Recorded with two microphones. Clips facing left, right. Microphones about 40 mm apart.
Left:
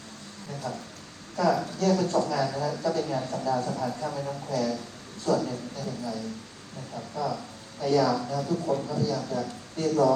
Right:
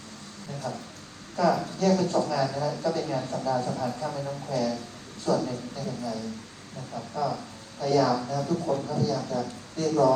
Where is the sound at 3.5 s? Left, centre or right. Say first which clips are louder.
Even; right.